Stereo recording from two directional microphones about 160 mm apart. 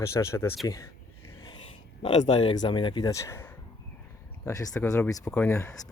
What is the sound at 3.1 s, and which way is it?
Speech, 20° left (ahead or behind).